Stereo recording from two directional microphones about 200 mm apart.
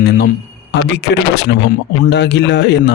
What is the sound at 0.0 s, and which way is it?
A man's voice, 55° left (ahead or behind).